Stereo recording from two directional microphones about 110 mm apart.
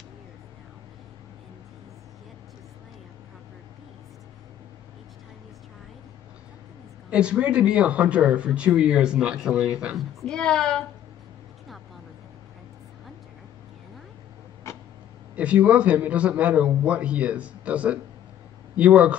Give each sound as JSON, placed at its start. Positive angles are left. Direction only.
{"t": 7.1, "sound": "speech", "side_deg": -10}
{"t": 10.2, "sound": "a woman's voice", "side_deg": 5}
{"t": 14.7, "sound": "a sound", "side_deg": 25}
{"t": 15.3, "sound": "speech", "side_deg": -10}